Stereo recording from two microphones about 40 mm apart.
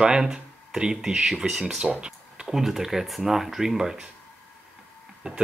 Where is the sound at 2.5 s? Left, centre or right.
Centre.